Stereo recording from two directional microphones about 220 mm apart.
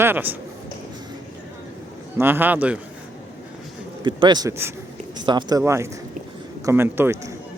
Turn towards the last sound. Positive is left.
turn(degrees=-10)  # may be behind; listen again after turning